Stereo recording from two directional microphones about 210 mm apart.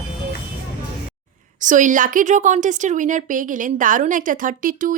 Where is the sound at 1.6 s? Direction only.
35° right (ahead or behind).